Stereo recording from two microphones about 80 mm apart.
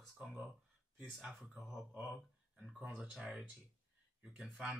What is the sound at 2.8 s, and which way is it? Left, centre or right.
Speech, centre.